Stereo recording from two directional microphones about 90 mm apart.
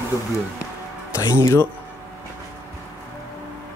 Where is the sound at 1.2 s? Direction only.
35° left (ahead or behind).